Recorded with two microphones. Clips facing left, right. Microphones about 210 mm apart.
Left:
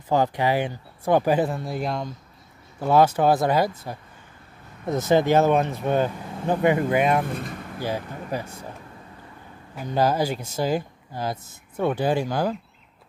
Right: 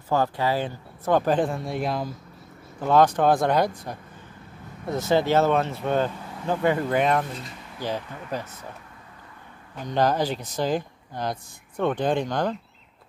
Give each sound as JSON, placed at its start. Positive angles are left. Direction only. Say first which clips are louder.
{"t": 0.1, "sound": "speech", "louder": "left 2 dB", "side_deg": 15}
{"t": 4.8, "sound": "speech", "louder": "left 2 dB", "side_deg": 20}
{"t": 7.2, "sound": "speech", "louder": "left 6 dB", "side_deg": 55}
{"t": 7.8, "sound": "speech", "louder": "left 1 dB", "side_deg": 10}
{"t": 9.8, "sound": "speech", "louder": "left 1 dB", "side_deg": 5}